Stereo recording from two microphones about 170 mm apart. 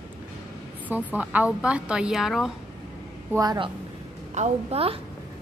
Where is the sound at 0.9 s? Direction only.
10° right (ahead or behind).